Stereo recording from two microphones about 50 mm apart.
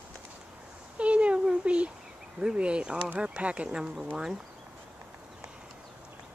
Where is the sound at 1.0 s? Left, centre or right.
Right.